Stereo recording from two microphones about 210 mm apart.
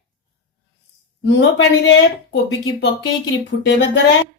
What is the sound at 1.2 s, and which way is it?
Speech, 60° left (ahead or behind).